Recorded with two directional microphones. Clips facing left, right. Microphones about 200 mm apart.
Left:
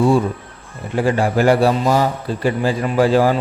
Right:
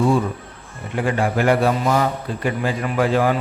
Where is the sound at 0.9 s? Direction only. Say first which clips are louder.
Left 4 dB; 35° left (ahead or behind).